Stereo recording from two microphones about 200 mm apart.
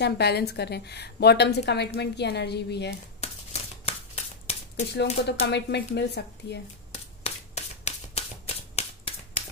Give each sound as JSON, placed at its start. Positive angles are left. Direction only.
{"t": 0.0, "sound": "a woman's voice", "side_deg": 55}
{"t": 3.2, "sound": "a sound", "side_deg": 30}
{"t": 5.2, "sound": "a woman's voice", "side_deg": 55}
{"t": 6.9, "sound": "shuffling cards", "side_deg": 30}